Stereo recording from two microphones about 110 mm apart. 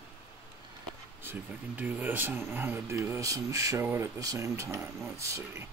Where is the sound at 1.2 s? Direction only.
15° right (ahead or behind).